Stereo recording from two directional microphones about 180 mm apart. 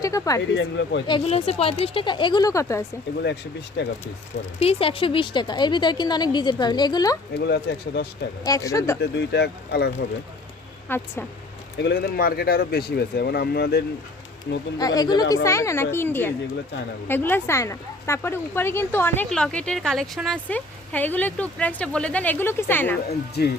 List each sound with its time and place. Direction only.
0.0 s speech: 20° left (ahead or behind)
0.5 s speech: 90° left
1.0 s a woman's voice: 30° left (ahead or behind)
3.8 s speech: 70° left (ahead or behind)
4.6 s a woman's voice: 30° left (ahead or behind)
7.3 s speech: 65° left (ahead or behind)
8.4 s speech: 20° left (ahead or behind)
9.0 s speech: 70° left (ahead or behind)
10.8 s speech: 10° left (ahead or behind)
11.8 s speech: 65° left (ahead or behind)
14.8 s a woman's voice: 20° left (ahead or behind)
23.0 s speech: 60° left (ahead or behind)